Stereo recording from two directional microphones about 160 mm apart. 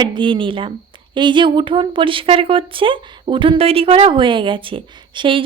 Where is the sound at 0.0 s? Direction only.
30° right (ahead or behind).